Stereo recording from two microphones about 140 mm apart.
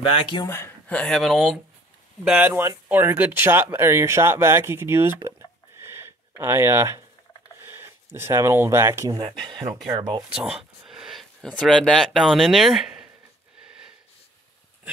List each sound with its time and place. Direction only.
0.1 s speech: 35° left (ahead or behind)
0.5 s speech: 15° left (ahead or behind); by 1.6 s centre (ahead or behind)
2.2 s speech: 10° right (ahead or behind)
5.9 s a sound: 20° right (ahead or behind)
7.6 s speech: 15° right (ahead or behind)
9.2 s speech: 35° right (ahead or behind)
10.3 s a sound: 5° right (ahead or behind)
11.4 s speech: 5° left (ahead or behind)